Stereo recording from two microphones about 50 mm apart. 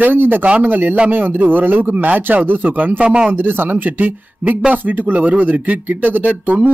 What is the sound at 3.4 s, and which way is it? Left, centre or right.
A man's voice, right.